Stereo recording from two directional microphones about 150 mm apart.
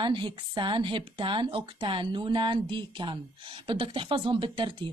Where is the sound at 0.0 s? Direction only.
30° right (ahead or behind).